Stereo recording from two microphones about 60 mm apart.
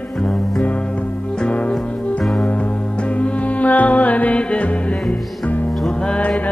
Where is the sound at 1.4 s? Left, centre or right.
Centre.